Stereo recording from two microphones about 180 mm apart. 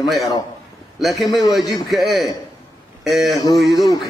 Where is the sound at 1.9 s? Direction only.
Centre (ahead or behind).